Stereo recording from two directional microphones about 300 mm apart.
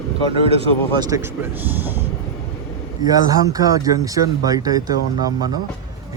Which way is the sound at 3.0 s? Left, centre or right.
Centre.